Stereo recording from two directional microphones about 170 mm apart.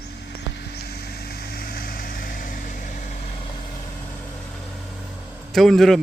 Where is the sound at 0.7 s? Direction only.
65° left (ahead or behind); by 2.8 s 50° left (ahead or behind).